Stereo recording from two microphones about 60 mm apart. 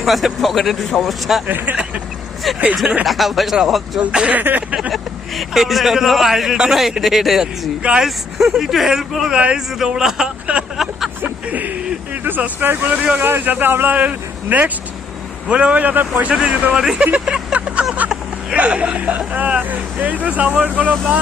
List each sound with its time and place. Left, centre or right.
0.0 s a man's voice: centre
1.5 s speech: right
2.7 s a man's voice: centre
4.0 s speech: centre
5.4 s a man's voice: centre
7.8 s speech: centre
8.0 s a man's voice: centre
9.3 s a man's voice: centre
10.8 s vehicle: centre
11.2 s a sound: right
12.8 s speech: right
13.2 s speech: right
13.9 s speech: right
16.3 s a man's voice: centre